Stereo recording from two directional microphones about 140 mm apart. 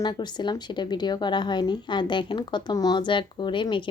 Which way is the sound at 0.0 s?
30° left (ahead or behind).